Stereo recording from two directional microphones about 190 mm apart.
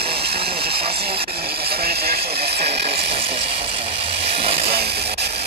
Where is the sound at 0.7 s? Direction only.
30° right (ahead or behind).